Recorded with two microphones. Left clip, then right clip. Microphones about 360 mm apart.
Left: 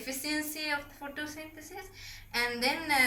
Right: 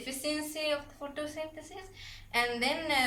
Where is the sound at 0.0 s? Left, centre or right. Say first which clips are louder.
Left 1 dB; right.